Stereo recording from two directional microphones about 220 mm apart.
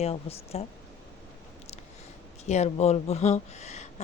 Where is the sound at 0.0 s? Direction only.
25° left (ahead or behind).